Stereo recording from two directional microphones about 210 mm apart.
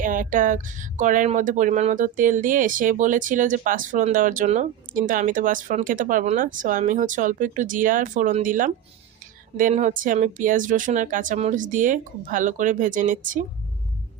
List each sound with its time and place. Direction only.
0.0 s speech: 40° right (ahead or behind)